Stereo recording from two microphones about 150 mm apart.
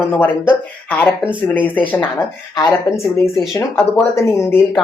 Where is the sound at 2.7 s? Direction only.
15° left (ahead or behind).